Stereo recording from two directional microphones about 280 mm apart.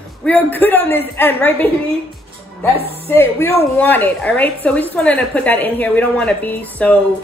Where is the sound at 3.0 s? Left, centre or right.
Centre.